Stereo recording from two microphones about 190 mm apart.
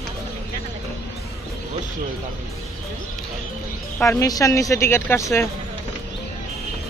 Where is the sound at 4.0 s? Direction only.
15° left (ahead or behind).